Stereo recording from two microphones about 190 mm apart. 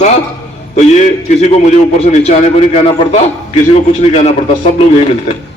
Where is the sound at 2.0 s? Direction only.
35° left (ahead or behind).